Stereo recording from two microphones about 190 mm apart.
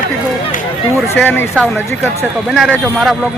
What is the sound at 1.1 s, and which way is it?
Speech, 10° left (ahead or behind).